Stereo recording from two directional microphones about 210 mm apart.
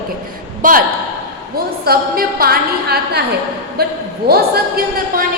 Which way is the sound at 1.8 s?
45° right (ahead or behind).